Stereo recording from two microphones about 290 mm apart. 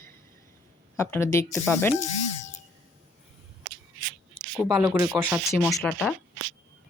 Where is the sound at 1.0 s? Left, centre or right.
Centre.